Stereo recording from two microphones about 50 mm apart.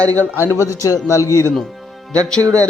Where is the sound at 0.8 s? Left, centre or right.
Left.